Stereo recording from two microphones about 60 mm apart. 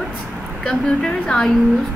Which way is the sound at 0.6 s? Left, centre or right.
Centre.